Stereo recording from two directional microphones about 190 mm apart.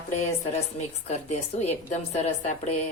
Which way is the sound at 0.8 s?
35° left (ahead or behind).